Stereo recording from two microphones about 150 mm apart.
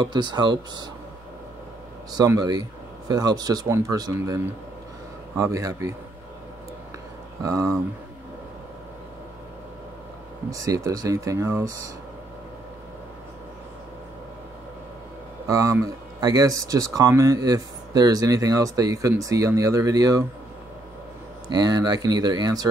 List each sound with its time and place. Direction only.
0.0 s speech: 30° right (ahead or behind)
2.1 s speech: 25° right (ahead or behind)
5.4 s speech: 20° right (ahead or behind)
7.4 s speech: 20° right (ahead or behind)
10.5 s speech: 20° right (ahead or behind)
15.4 s speech: 20° right (ahead or behind)
21.5 s speech: 25° right (ahead or behind)